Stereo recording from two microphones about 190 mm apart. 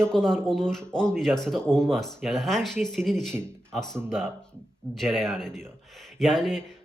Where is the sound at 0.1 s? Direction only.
5° left (ahead or behind).